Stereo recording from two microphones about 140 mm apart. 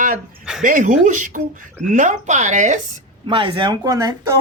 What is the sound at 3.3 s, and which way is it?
Speech, 35° right (ahead or behind).